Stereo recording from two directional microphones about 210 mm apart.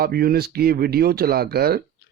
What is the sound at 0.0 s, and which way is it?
Speech, 45° right (ahead or behind).